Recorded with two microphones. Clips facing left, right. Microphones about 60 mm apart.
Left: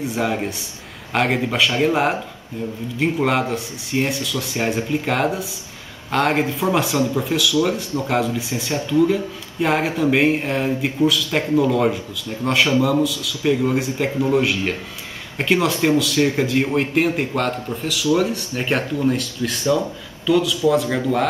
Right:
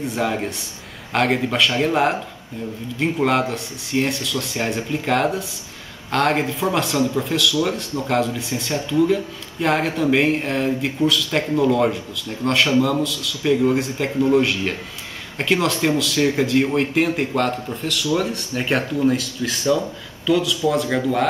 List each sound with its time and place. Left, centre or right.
0.0 s speech: centre